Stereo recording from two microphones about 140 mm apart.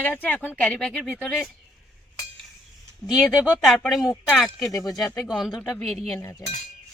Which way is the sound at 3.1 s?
5° right (ahead or behind).